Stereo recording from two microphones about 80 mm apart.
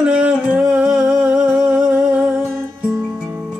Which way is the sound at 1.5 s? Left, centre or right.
Right.